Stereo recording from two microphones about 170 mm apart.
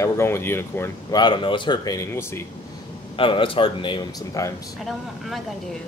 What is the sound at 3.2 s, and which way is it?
Speech, 30° left (ahead or behind).